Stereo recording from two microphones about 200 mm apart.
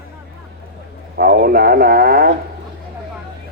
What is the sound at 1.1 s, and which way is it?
Speech, 50° right (ahead or behind).